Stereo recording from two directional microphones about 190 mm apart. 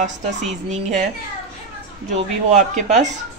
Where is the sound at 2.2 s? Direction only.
35° right (ahead or behind).